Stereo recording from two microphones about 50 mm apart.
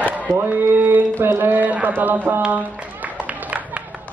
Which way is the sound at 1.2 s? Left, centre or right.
Right.